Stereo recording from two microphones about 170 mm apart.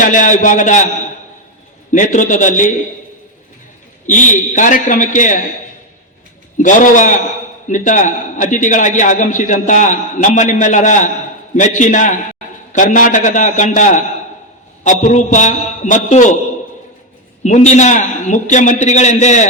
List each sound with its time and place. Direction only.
0.0 s a man's voice: 50° left (ahead or behind)
1.9 s a man's voice: 50° left (ahead or behind)
4.0 s a man's voice: 50° left (ahead or behind)
6.6 s a man's voice: 50° left (ahead or behind)
17.4 s a man's voice: 45° left (ahead or behind)